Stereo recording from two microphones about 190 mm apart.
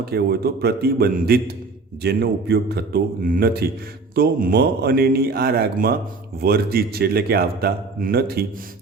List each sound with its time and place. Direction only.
0.0 s a man's voice: 55° right (ahead or behind)